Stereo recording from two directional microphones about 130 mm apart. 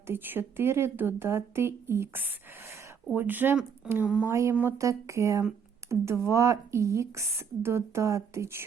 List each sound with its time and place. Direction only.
0.1 s speech: 15° right (ahead or behind)
4.0 s speech: 5° right (ahead or behind)
4.3 s speech: 20° right (ahead or behind)